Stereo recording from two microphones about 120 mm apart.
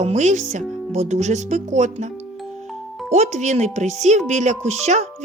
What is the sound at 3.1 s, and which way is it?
Speech, 70° right (ahead or behind).